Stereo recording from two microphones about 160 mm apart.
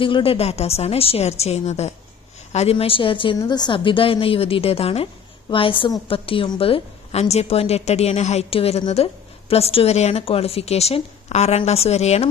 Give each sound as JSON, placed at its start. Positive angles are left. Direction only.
{"t": 0.0, "sound": "a woman's voice", "side_deg": 35}